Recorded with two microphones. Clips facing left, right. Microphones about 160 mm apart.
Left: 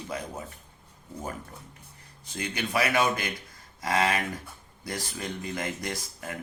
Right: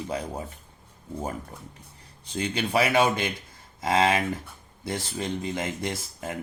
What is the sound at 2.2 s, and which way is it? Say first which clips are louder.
Speech: right 5 dB; 30° right (ahead or behind).